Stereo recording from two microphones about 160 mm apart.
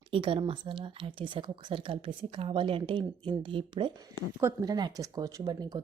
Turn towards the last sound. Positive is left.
turn(degrees=-25)  # may be behind; listen again after turning